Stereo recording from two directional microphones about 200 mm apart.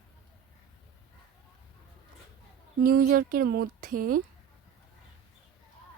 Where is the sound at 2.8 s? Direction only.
50° right (ahead or behind).